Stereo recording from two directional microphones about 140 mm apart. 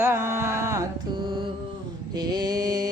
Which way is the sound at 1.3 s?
35° right (ahead or behind).